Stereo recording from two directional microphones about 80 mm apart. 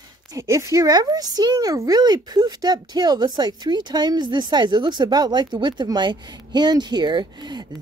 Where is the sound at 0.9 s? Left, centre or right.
Right.